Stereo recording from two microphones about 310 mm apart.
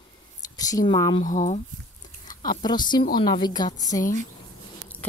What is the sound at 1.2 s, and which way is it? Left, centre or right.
Speech, left.